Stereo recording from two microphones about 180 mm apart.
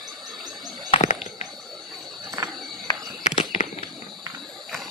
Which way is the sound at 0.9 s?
35° left (ahead or behind).